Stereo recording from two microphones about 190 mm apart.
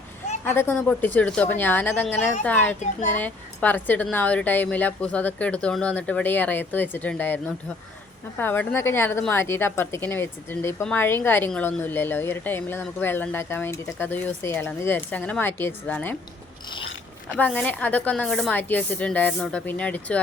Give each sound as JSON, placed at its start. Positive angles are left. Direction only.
{"t": 0.4, "sound": "a woman's voice", "side_deg": 10}
{"t": 2.8, "sound": "a child's voice", "side_deg": 40}
{"t": 3.2, "sound": "a woman's voice", "side_deg": 10}
{"t": 17.3, "sound": "a woman's voice", "side_deg": 5}